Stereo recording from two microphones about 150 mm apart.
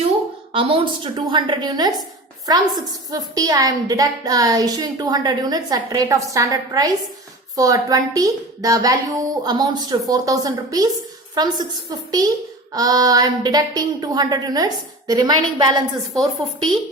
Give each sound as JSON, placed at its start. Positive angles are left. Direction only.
{"t": 0.5, "sound": "a woman's voice", "side_deg": -35}